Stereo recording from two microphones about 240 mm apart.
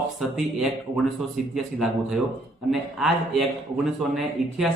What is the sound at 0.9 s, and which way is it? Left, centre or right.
Speech, centre.